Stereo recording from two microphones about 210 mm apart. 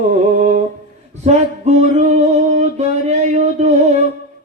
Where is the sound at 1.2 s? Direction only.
30° right (ahead or behind).